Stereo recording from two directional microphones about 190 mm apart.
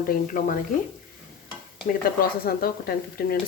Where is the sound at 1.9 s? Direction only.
50° left (ahead or behind).